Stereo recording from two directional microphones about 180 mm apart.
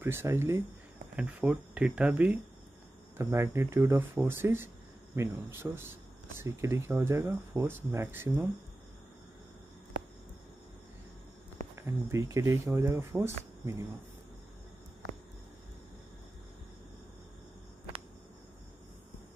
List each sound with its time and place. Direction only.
0.0 s speech: 15° right (ahead or behind)
11.7 s speech: 15° right (ahead or behind)